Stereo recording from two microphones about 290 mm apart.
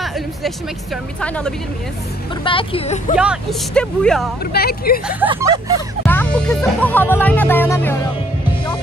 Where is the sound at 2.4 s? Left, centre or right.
Centre.